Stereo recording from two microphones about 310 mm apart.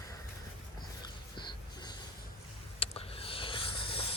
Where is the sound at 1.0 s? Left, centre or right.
Centre.